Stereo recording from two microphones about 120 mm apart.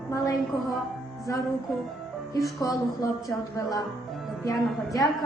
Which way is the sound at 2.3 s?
30° left (ahead or behind).